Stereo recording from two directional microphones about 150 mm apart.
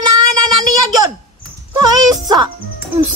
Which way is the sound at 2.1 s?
25° right (ahead or behind).